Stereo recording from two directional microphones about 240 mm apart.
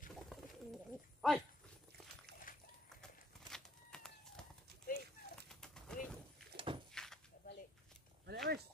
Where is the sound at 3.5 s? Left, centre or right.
Centre.